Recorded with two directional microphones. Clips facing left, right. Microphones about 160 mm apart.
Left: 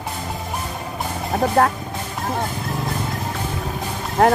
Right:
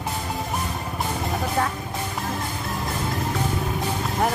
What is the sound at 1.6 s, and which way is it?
Speech, 60° left (ahead or behind).